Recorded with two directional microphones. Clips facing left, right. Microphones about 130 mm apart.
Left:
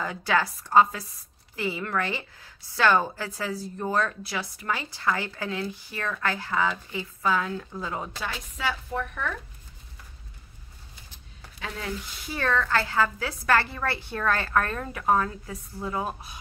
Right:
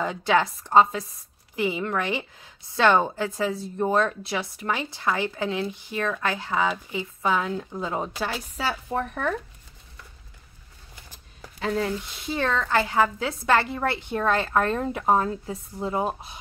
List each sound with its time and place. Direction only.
0.0 s a woman's voice: 20° right (ahead or behind)
8.5 s speech: 40° right (ahead or behind)
11.6 s speech: 35° right (ahead or behind)
12.3 s a woman's voice: 20° right (ahead or behind)